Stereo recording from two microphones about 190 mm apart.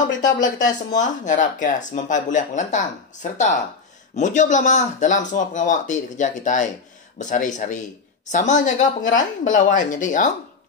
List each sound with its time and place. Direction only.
0.4 s speech: 40° left (ahead or behind)